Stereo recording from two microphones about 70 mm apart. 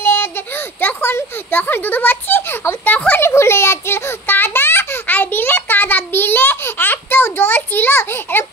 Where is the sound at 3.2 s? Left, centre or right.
Left.